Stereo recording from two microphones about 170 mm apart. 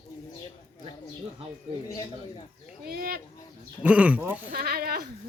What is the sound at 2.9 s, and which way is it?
Speech, 65° right (ahead or behind).